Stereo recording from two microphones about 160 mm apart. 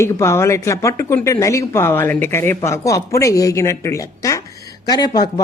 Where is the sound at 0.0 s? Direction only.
15° left (ahead or behind).